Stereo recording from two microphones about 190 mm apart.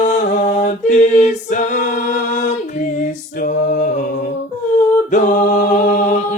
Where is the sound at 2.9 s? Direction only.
45° left (ahead or behind).